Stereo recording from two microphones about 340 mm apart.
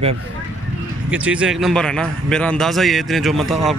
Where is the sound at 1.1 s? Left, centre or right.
Centre.